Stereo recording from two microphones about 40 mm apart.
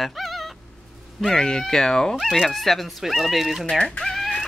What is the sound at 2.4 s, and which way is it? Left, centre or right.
Speech, centre.